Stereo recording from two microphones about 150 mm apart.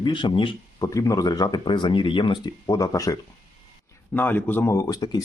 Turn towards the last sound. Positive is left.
turn(degrees=25)  # may be behind; listen again after turning